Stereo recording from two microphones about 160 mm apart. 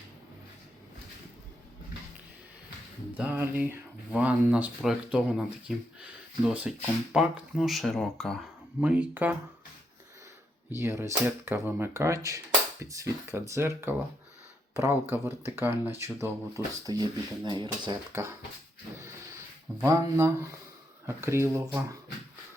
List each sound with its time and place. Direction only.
3.2 s speech: 10° right (ahead or behind)
8.8 s speech: 10° right (ahead or behind)
10.7 s speech: 15° right (ahead or behind)
18.1 s speech: 15° right (ahead or behind)
19.8 s speech: 15° right (ahead or behind)